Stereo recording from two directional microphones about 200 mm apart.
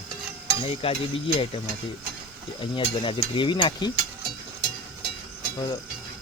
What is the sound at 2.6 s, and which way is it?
Speech, 25° left (ahead or behind).